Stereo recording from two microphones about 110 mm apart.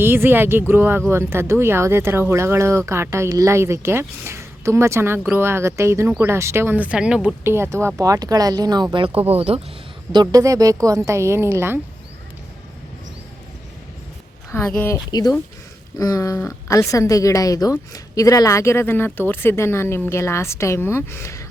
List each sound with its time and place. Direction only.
0.0 s speech: 20° right (ahead or behind)
7.4 s speech: 20° right (ahead or behind); by 9.2 s 50° right (ahead or behind)
9.3 s speech: 65° right (ahead or behind)
10.1 s speech: 40° right (ahead or behind)
10.4 s speech: 30° right (ahead or behind)
14.5 s speech: 20° left (ahead or behind)
15.1 s a sound: 40° left (ahead or behind)
16.4 s speech: 25° left (ahead or behind)